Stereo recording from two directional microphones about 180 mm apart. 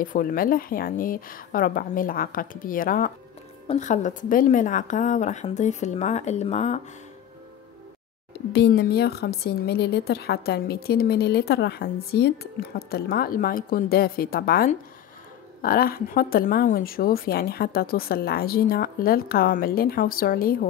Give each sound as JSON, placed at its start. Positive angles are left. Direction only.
{"t": 0.0, "sound": "a woman's voice", "side_deg": 50}
{"t": 8.3, "sound": "a woman's voice", "side_deg": 65}